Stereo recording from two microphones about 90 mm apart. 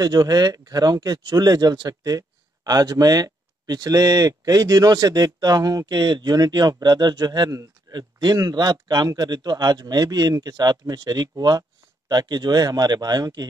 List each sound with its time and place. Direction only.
0.0 s speech: 45° right (ahead or behind)